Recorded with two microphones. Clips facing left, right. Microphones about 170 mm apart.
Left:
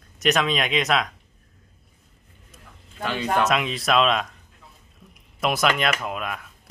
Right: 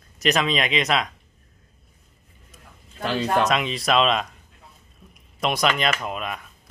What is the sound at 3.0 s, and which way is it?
Speech, 35° right (ahead or behind).